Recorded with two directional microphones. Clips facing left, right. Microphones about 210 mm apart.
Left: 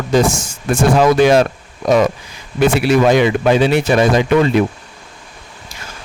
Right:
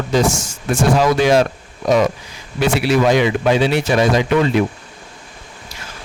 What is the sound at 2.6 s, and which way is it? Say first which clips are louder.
A man's voice: left 3 dB; 50° left (ahead or behind).